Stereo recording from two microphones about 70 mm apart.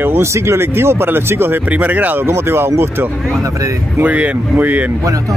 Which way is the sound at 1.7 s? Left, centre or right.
Right.